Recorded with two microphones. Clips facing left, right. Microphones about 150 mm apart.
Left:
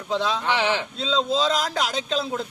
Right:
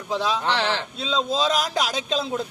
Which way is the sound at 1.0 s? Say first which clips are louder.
Left 1 dB; 10° right (ahead or behind).